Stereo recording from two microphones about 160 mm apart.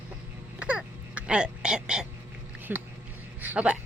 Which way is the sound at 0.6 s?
10° right (ahead or behind).